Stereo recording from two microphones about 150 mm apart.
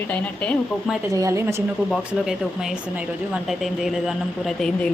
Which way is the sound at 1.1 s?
20° right (ahead or behind).